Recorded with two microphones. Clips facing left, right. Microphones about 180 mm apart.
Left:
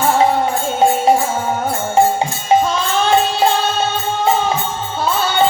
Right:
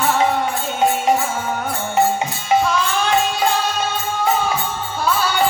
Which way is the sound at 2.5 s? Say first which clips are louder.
Left 2 dB; 30° left (ahead or behind).